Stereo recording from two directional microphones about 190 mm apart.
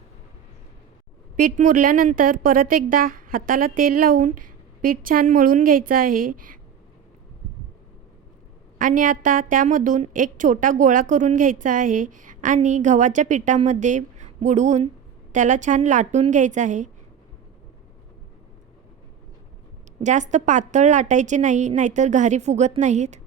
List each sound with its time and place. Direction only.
1.4 s a woman's voice: 45° right (ahead or behind)
8.8 s a woman's voice: 45° right (ahead or behind)
20.0 s a woman's voice: 40° right (ahead or behind)